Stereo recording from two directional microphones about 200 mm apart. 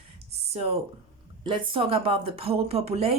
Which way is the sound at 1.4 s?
25° right (ahead or behind).